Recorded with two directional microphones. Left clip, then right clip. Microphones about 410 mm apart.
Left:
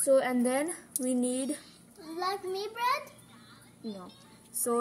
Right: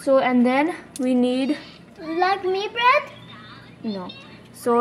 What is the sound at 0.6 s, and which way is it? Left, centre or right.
Speech, left.